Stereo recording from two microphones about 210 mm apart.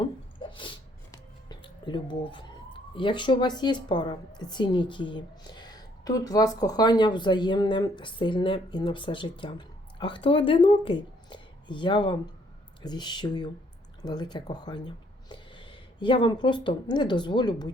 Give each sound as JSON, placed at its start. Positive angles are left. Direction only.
{"t": 0.0, "sound": "a sound", "side_deg": 25}
{"t": 1.1, "sound": "music", "side_deg": 20}
{"t": 2.9, "sound": "a woman's voice", "side_deg": 25}